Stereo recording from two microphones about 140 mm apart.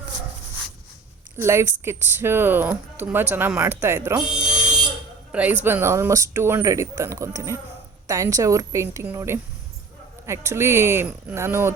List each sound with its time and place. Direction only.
1.4 s speech: 20° right (ahead or behind)
5.3 s speech: 10° right (ahead or behind)